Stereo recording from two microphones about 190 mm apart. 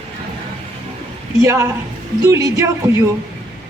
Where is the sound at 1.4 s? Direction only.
15° right (ahead or behind).